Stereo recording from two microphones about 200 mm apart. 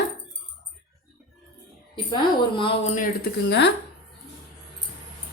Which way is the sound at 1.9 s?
25° left (ahead or behind).